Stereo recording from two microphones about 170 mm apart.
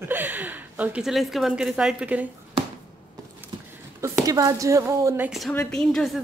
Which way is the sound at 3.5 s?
25° right (ahead or behind).